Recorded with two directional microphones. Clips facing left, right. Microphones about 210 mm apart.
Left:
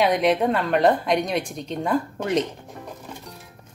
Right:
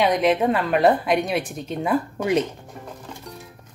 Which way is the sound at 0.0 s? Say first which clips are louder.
Right 1 dB; centre (ahead or behind).